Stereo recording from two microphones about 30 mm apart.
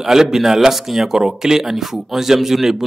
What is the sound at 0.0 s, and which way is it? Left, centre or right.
Speech, centre.